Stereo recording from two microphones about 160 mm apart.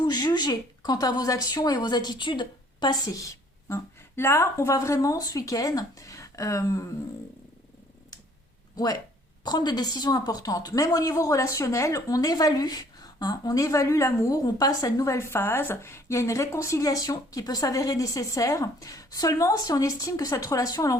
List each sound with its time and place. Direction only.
0.0 s a woman's voice: 25° left (ahead or behind)
8.7 s a woman's voice: 25° left (ahead or behind)